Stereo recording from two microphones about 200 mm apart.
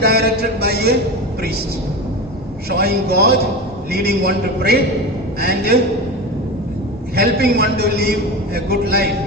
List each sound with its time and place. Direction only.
0.0 s music: 50° right (ahead or behind)
2.6 s a man's voice: 50° right (ahead or behind)
7.2 s a man's voice: 50° right (ahead or behind)